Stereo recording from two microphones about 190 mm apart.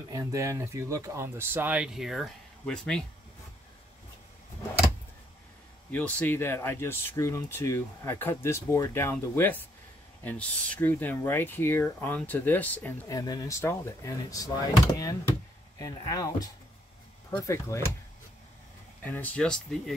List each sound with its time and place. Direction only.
0.1 s speech: 15° right (ahead or behind); by 3.1 s 5° left (ahead or behind)
5.9 s speech: 10° left (ahead or behind)
19.0 s speech: 10° left (ahead or behind)